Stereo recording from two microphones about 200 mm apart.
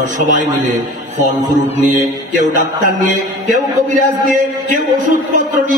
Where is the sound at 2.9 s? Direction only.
40° right (ahead or behind).